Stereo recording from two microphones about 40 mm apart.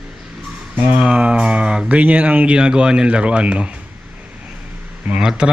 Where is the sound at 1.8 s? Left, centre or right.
Right.